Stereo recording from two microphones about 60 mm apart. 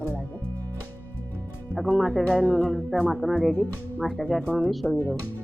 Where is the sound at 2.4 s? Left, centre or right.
Left.